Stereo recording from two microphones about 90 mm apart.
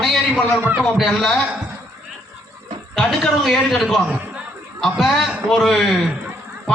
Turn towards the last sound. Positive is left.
turn(degrees=0)  # may be behind; listen again after turning